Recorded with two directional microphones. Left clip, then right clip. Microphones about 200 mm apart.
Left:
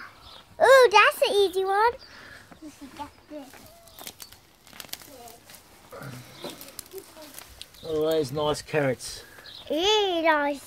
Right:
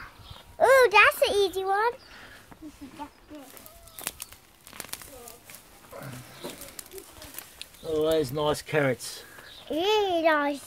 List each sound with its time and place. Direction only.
0.6 s a sound: 20° left (ahead or behind)
7.8 s speech: 10° left (ahead or behind)
9.7 s a child's voice: 40° left (ahead or behind)